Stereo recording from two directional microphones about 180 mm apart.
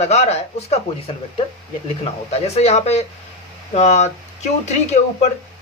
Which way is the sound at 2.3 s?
35° left (ahead or behind).